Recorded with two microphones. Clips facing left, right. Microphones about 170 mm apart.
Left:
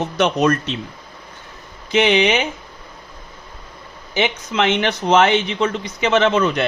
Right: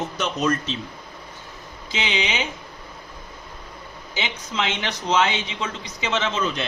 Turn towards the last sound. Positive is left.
turn(degrees=65)  # may be behind; listen again after turning